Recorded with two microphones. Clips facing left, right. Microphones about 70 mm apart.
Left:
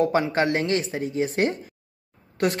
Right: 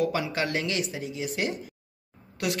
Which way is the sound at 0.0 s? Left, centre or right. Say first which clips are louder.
Left 6 dB; left.